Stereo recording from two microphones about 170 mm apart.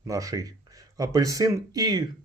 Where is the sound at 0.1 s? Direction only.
20° right (ahead or behind).